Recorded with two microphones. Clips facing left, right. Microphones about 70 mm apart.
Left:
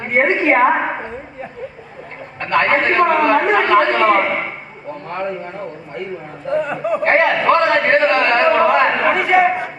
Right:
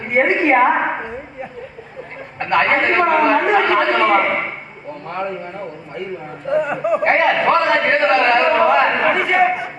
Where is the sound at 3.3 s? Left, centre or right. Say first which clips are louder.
Left 1 dB; left.